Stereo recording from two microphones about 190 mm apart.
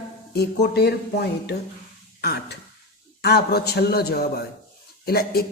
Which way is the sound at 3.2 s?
55° left (ahead or behind).